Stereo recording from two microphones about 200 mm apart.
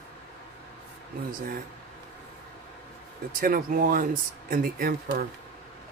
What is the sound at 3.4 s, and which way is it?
Speech, 45° right (ahead or behind).